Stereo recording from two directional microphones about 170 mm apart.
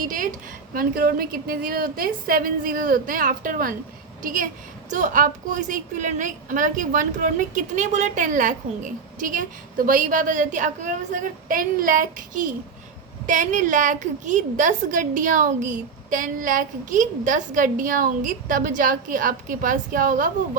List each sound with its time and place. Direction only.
0.0 s a woman's voice: 50° right (ahead or behind)